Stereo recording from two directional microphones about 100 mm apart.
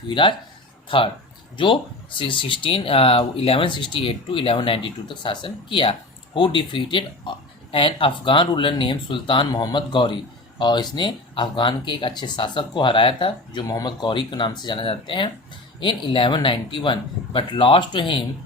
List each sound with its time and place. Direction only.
0.1 s speech: 55° left (ahead or behind)
9.5 s speech: 35° left (ahead or behind)
9.7 s speech: 55° left (ahead or behind)